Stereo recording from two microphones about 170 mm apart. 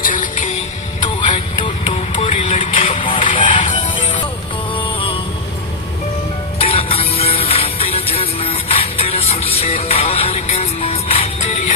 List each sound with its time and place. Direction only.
0.0 s music: 50° left (ahead or behind)
1.0 s vehicle: 30° left (ahead or behind)
2.9 s music: 30° left (ahead or behind)
6.6 s music: 35° left (ahead or behind)